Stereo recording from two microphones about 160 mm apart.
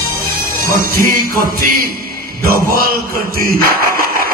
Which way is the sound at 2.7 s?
65° right (ahead or behind).